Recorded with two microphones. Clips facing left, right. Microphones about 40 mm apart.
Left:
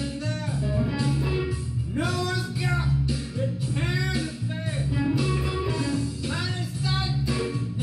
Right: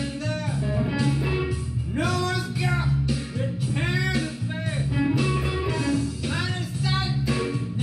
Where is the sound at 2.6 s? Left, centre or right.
Right.